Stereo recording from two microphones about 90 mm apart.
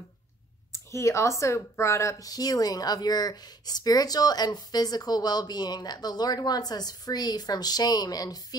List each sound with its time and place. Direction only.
0.7 s speech: 35° left (ahead or behind)